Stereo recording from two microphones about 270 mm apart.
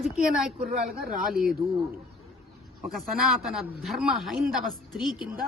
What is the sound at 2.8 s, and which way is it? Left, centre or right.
A man's voice, centre.